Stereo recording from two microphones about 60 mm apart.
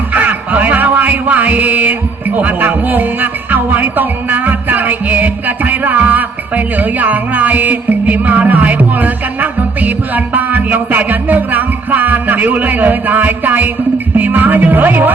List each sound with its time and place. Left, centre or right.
0.1 s music: right
14.2 s speech: right